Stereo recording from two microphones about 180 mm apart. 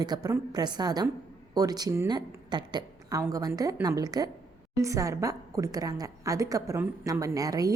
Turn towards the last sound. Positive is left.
turn(degrees=-20)  # may be behind; listen again after turning